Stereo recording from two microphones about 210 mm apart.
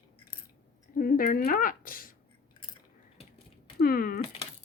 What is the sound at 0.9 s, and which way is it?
Speech, 45° left (ahead or behind).